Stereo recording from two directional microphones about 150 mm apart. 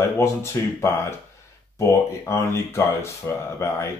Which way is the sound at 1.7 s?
15° left (ahead or behind).